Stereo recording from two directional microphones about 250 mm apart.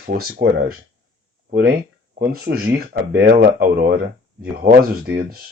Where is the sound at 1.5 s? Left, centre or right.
Right.